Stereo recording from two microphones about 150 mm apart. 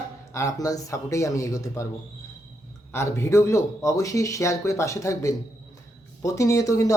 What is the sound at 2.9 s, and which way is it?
Speech, 15° left (ahead or behind).